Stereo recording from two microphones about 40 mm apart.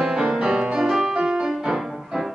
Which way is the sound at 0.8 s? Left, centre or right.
Centre.